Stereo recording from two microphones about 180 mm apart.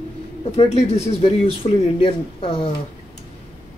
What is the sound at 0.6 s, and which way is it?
Speech, 35° left (ahead or behind).